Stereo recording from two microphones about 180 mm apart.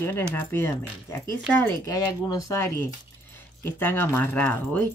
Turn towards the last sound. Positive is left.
turn(degrees=10)  # may be behind; listen again after turning